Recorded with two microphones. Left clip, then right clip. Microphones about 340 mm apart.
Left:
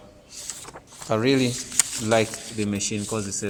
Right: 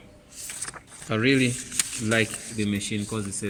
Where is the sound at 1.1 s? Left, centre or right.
Centre.